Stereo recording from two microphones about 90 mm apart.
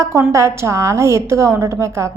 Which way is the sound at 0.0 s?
35° right (ahead or behind).